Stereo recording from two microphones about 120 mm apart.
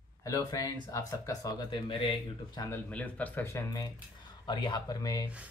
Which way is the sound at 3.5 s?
30° left (ahead or behind).